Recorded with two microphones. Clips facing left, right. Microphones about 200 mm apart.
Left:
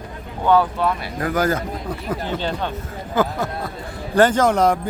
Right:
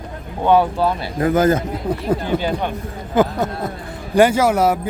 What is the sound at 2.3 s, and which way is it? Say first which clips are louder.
Speech: right 4 dB; 10° right (ahead or behind).